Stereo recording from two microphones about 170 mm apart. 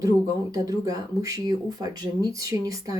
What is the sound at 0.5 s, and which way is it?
Speech, 20° right (ahead or behind).